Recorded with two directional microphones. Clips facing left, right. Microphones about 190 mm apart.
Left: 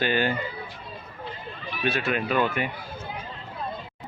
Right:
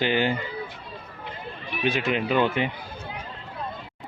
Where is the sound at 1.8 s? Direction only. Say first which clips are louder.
Right 2 dB; 15° right (ahead or behind).